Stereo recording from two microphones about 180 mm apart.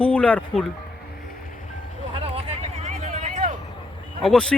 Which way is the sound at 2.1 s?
35° right (ahead or behind).